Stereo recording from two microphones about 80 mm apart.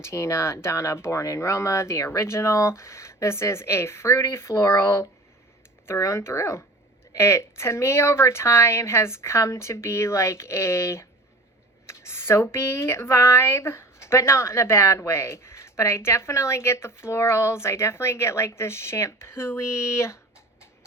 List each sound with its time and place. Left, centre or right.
0.0 s speech: left